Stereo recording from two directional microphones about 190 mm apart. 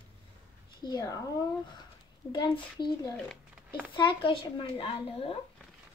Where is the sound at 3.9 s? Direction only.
25° left (ahead or behind).